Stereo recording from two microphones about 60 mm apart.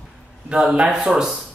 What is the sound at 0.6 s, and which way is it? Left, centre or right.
Speech, centre.